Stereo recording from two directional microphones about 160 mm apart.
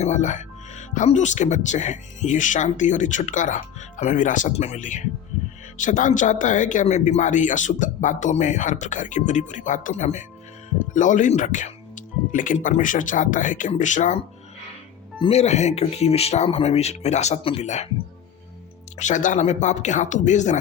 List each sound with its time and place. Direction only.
0.0 s speech: 50° left (ahead or behind)
15.2 s speech: 40° left (ahead or behind)
18.9 s speech: 50° left (ahead or behind)